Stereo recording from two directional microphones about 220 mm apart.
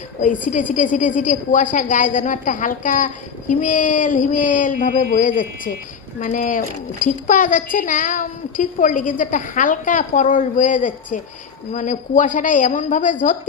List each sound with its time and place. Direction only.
0.4 s a woman's voice: 35° left (ahead or behind)